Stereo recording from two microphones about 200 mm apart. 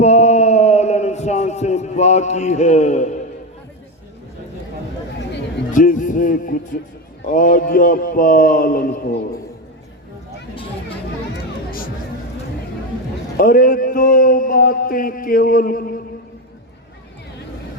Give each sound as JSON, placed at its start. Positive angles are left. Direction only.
{"t": 0.0, "sound": "a sound", "side_deg": 35}
{"t": 5.7, "sound": "music", "side_deg": 40}
{"t": 7.3, "sound": "a man's voice", "side_deg": 45}
{"t": 13.3, "sound": "a man's voice", "side_deg": 45}